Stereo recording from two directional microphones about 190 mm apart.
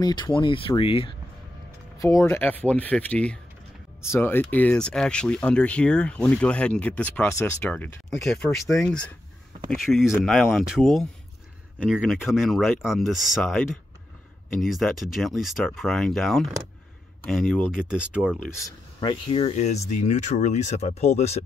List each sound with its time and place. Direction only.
0.0 s speech: 25° left (ahead or behind)
2.0 s speech: 15° left (ahead or behind)
9.7 s speech: centre (ahead or behind)
18.9 s speech: 30° left (ahead or behind)